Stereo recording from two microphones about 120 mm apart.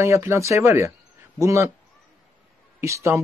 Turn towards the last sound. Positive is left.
turn(degrees=-20)  # may be behind; listen again after turning